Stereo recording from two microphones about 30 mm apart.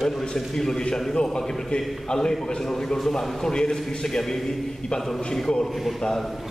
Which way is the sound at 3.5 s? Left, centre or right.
Left.